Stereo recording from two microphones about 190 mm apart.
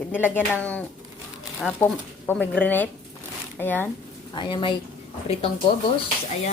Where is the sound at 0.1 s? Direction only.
10° left (ahead or behind).